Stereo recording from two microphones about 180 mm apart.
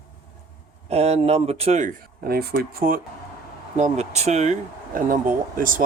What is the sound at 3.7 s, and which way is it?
Speech, 40° right (ahead or behind).